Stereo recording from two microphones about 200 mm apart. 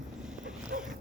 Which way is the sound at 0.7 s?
55° right (ahead or behind).